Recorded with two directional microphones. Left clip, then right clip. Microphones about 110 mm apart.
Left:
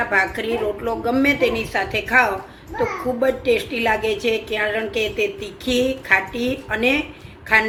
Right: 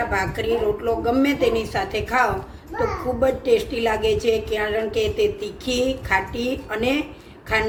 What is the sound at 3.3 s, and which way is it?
A woman's voice, 40° left (ahead or behind).